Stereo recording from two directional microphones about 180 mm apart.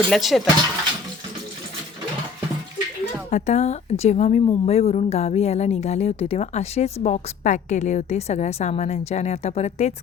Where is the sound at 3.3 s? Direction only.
40° left (ahead or behind).